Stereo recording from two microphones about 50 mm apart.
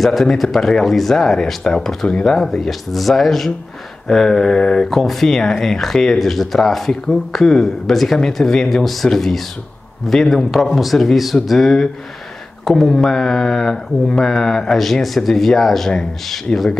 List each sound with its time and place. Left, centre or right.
0.0 s speech: centre
2.0 s speech: left
2.3 s speech: centre